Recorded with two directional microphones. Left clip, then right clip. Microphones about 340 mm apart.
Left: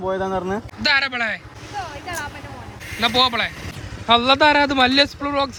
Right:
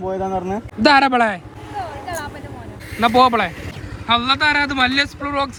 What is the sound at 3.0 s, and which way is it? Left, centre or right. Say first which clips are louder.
Speech: right 4 dB; centre.